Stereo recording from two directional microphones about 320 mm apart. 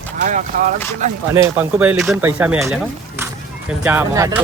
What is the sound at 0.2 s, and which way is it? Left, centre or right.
Speech, right.